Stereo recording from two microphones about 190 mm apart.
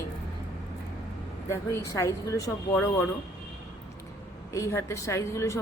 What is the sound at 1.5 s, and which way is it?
Speech, 15° left (ahead or behind).